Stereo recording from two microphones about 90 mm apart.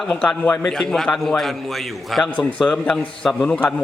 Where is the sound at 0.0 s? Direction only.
10° left (ahead or behind).